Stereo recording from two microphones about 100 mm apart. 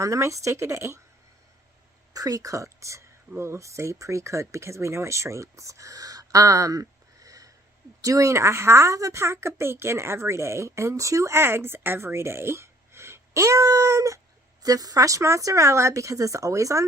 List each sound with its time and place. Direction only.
0.0 s speech: 30° right (ahead or behind)
2.1 s speech: 35° right (ahead or behind)